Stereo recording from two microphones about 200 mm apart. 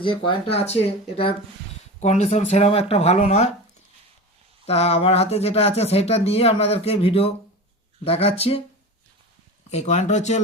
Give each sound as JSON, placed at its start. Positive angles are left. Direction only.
{"t": 0.0, "sound": "speech", "side_deg": 25}
{"t": 4.6, "sound": "speech", "side_deg": 30}
{"t": 9.6, "sound": "speech", "side_deg": 35}